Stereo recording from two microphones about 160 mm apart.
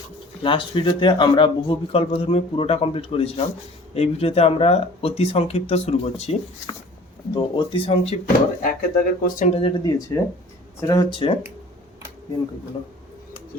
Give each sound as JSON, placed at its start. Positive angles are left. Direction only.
{"t": 0.4, "sound": "a man's voice", "side_deg": 30}
{"t": 7.3, "sound": "a man's voice", "side_deg": 30}
{"t": 8.6, "sound": "speech", "side_deg": 60}
{"t": 9.5, "sound": "a man's voice", "side_deg": 35}
{"t": 10.2, "sound": "speech", "side_deg": 20}